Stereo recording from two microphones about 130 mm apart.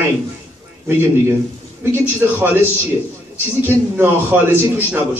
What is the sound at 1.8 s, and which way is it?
Speech, 15° right (ahead or behind).